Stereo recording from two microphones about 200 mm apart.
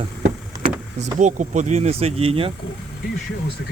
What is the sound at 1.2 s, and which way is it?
Speech, 40° right (ahead or behind).